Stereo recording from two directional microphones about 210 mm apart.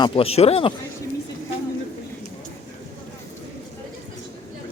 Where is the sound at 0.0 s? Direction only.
25° left (ahead or behind).